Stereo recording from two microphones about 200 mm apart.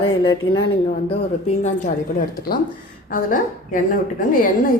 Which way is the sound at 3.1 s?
45° left (ahead or behind).